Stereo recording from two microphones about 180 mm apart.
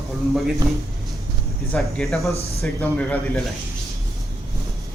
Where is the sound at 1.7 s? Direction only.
5° left (ahead or behind).